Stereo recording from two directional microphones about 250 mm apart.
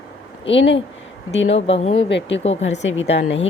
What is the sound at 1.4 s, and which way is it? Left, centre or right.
Speech, left.